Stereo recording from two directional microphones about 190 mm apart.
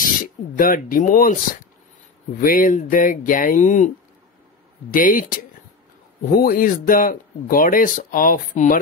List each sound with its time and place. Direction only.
0.6 s speech: 45° left (ahead or behind)
4.9 s speech: 45° left (ahead or behind)